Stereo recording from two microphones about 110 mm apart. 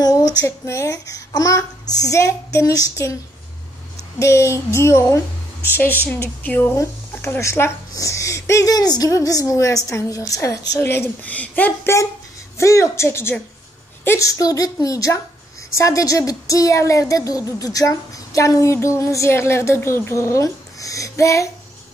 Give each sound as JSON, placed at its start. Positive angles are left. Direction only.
{"t": 0.0, "sound": "a sound", "side_deg": 35}
{"t": 0.7, "sound": "a child's voice", "side_deg": 25}
{"t": 4.2, "sound": "speech", "side_deg": 25}
{"t": 6.4, "sound": "speech", "side_deg": 15}
{"t": 6.7, "sound": "speech", "side_deg": 25}
{"t": 12.5, "sound": "a child's voice", "side_deg": 25}